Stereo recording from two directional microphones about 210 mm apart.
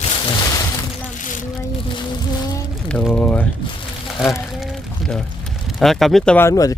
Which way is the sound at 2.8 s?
5° left (ahead or behind).